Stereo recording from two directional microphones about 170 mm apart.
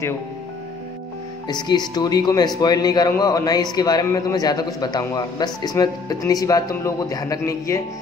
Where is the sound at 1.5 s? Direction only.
25° left (ahead or behind).